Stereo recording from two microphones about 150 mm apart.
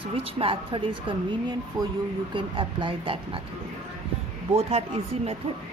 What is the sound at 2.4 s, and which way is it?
Speech, 35° right (ahead or behind).